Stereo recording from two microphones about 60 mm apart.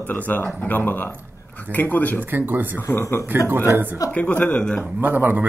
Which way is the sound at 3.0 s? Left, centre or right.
Left.